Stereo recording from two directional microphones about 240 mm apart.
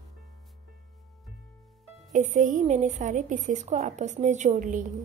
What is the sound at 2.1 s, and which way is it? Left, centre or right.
A woman's voice, right.